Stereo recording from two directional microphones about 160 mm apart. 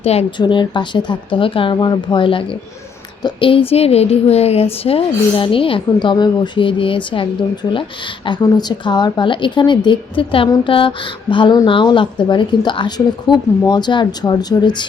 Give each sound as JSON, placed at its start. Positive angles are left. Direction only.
{"t": 0.0, "sound": "a woman's voice", "side_deg": 40}